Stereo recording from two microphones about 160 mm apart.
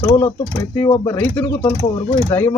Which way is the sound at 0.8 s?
15° left (ahead or behind).